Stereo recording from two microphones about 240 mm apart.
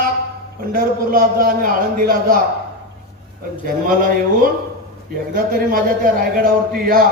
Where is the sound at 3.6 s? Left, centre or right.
Right.